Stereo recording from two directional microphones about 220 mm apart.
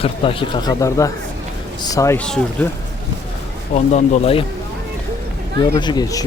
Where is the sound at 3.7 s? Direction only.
30° left (ahead or behind).